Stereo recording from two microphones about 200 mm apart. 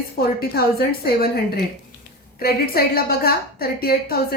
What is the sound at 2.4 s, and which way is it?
A woman's voice, 50° left (ahead or behind).